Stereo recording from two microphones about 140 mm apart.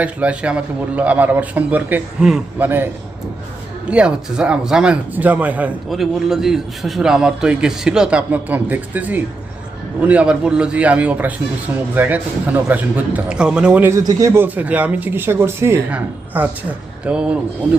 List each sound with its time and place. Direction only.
0.0 s speech: 10° right (ahead or behind)
13.9 s speech: 25° right (ahead or behind); by 17.3 s 5° right (ahead or behind)